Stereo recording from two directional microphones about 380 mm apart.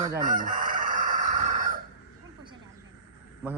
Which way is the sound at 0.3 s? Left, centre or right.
Right.